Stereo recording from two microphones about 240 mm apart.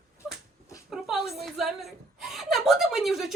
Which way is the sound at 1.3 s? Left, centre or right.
Centre.